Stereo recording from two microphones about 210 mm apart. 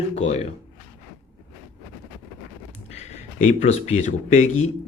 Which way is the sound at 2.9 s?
30° left (ahead or behind).